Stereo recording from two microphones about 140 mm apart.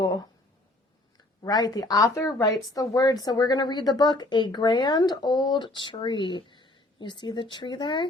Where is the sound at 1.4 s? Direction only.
30° left (ahead or behind).